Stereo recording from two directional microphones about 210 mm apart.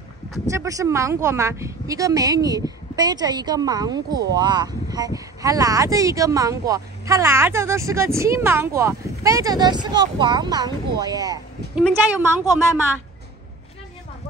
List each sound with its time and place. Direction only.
0.5 s speech: 15° right (ahead or behind)